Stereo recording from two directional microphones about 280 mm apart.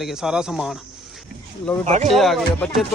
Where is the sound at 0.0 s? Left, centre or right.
Centre.